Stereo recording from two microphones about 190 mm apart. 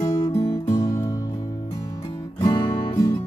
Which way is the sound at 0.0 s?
20° left (ahead or behind).